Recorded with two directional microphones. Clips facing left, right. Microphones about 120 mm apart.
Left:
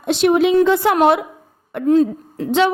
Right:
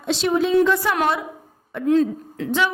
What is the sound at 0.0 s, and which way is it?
Speech, 60° left (ahead or behind).